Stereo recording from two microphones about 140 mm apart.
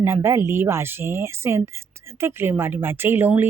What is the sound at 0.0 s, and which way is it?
Speech, 20° right (ahead or behind).